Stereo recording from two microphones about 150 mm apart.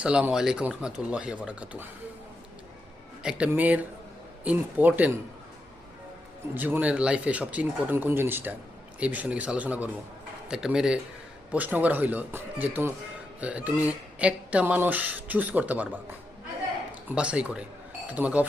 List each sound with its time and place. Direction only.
0.0 s speech: 5° right (ahead or behind)
3.2 s speech: 10° right (ahead or behind)
6.5 s speech: 10° right (ahead or behind)
16.9 s speech: 10° right (ahead or behind)